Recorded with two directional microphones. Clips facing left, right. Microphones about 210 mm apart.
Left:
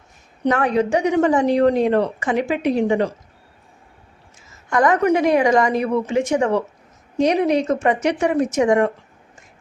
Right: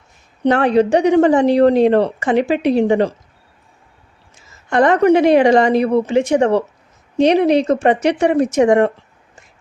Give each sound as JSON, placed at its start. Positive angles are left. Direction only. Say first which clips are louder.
{"t": 0.4, "sound": "speech", "louder": "right 5 dB", "side_deg": -30}
{"t": 4.7, "sound": "speech", "louder": "right 5 dB", "side_deg": -30}